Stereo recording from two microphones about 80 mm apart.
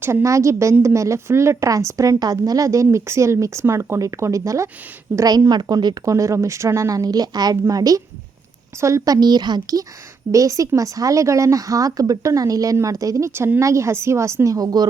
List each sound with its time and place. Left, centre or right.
0.0 s a woman's voice: right
9.2 s speech: right
10.3 s a woman's voice: right